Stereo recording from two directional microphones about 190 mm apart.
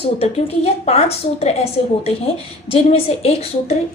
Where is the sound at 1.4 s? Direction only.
35° left (ahead or behind).